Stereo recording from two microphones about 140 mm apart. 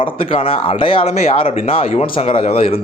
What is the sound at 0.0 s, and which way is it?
Speech, 40° left (ahead or behind).